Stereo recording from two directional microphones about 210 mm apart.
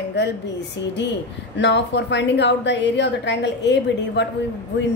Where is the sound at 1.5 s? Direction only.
55° left (ahead or behind).